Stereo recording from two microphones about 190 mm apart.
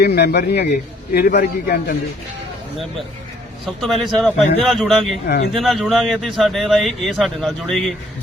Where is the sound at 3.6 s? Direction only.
Centre (ahead or behind).